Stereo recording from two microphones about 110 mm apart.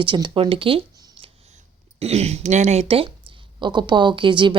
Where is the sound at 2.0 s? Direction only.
75° right (ahead or behind); by 3.1 s 60° right (ahead or behind).